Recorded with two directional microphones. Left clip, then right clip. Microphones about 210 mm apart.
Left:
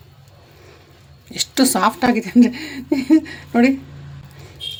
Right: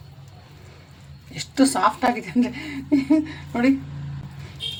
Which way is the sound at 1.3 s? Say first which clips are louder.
Left 3 dB; 50° left (ahead or behind).